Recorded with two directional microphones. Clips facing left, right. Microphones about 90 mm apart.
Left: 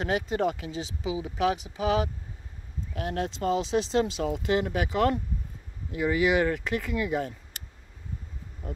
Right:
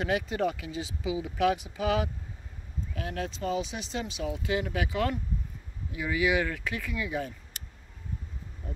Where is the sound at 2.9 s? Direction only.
50° left (ahead or behind).